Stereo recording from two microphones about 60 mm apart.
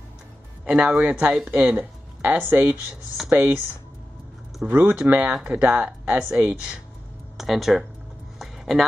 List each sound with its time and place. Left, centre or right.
0.7 s speech: right
4.6 s speech: right
7.3 s speech: centre
8.4 s a sound: centre